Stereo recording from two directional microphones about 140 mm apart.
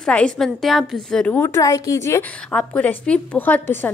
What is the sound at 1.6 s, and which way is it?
A woman's voice, 25° left (ahead or behind).